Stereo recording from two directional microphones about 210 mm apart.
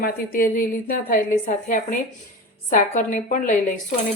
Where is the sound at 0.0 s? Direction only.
45° left (ahead or behind).